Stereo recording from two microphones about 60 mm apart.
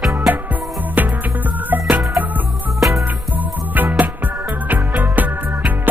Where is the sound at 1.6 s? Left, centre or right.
Right.